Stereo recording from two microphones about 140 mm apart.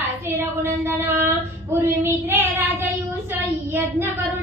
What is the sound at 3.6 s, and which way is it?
Child singing, 15° right (ahead or behind).